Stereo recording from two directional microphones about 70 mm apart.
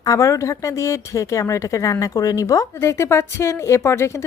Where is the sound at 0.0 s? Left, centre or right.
Left.